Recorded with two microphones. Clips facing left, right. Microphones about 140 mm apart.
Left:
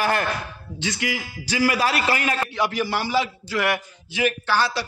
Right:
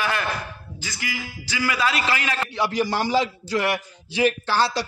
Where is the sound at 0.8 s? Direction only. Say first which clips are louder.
Left 6 dB; 65° left (ahead or behind).